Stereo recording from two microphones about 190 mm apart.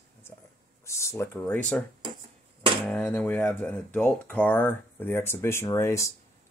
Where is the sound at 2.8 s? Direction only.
5° left (ahead or behind).